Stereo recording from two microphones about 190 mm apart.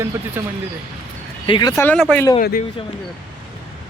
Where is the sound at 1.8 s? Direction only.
5° left (ahead or behind).